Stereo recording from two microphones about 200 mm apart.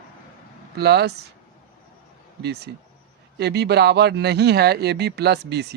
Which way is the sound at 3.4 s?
55° right (ahead or behind).